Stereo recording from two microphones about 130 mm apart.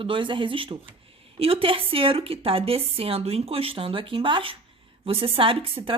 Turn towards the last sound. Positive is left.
turn(degrees=-45)  # may be behind; listen again after turning